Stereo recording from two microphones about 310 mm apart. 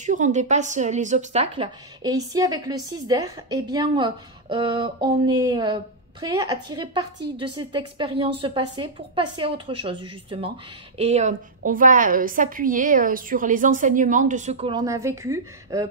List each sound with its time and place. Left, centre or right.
0.0 s a woman's voice: right